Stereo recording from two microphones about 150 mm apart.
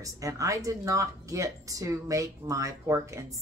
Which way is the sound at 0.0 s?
20° right (ahead or behind).